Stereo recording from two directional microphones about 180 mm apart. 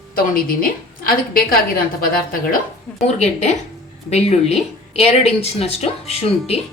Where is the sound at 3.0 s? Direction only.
40° left (ahead or behind).